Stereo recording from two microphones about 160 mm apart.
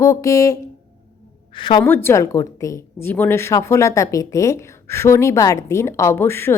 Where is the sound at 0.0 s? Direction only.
20° left (ahead or behind).